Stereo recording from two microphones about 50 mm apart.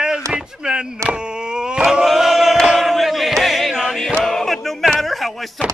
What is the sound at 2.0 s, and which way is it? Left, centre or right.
Choir, centre.